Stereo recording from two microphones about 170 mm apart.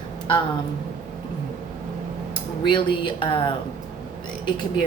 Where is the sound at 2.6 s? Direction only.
30° left (ahead or behind).